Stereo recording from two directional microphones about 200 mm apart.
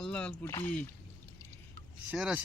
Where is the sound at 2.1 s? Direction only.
5° right (ahead or behind).